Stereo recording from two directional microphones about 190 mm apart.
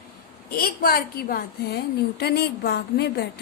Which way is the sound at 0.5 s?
50° left (ahead or behind).